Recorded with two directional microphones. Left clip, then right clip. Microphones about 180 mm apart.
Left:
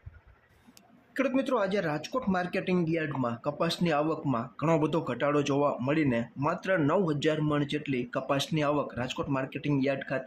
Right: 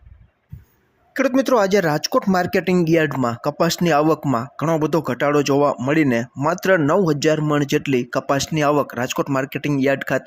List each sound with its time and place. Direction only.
1.1 s speech: 40° right (ahead or behind)